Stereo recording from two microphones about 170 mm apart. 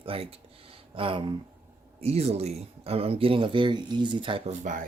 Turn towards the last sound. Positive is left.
turn(degrees=-50)  # may be behind; listen again after turning